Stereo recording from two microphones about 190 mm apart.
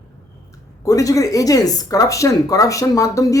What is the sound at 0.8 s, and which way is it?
Speech, 15° left (ahead or behind).